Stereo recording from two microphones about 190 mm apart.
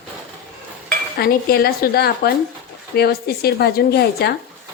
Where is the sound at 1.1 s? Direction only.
55° left (ahead or behind).